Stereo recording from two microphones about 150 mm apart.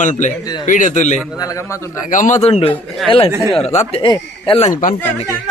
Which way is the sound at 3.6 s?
45° left (ahead or behind).